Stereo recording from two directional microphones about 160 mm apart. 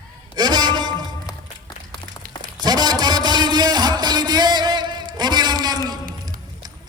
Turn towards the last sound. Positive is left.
turn(degrees=-25)  # may be behind; listen again after turning